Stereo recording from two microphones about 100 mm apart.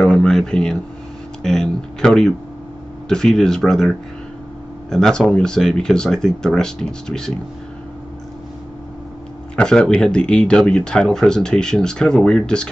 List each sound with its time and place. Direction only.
0.0 s speech: 5° left (ahead or behind)
9.6 s speech: 10° left (ahead or behind)